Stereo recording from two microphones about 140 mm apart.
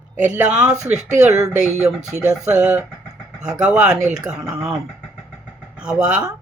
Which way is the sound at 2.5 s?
10° right (ahead or behind).